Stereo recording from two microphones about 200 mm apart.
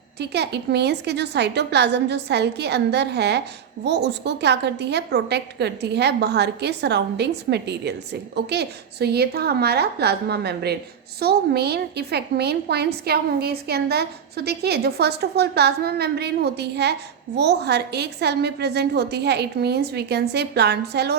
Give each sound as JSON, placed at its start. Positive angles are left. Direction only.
{"t": 0.2, "sound": "a woman's voice", "side_deg": -55}